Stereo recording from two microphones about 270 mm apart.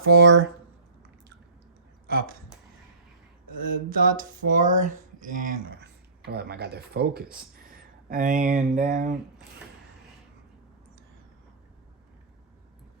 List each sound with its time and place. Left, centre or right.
0.0 s speech: right
2.0 s speech: right
3.9 s speech: right